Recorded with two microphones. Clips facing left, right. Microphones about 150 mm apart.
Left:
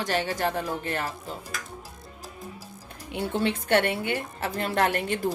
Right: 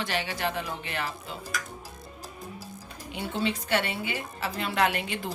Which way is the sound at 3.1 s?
55° left (ahead or behind).